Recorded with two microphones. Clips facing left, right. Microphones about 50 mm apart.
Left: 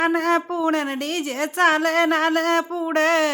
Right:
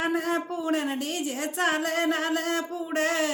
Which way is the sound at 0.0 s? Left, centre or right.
Left.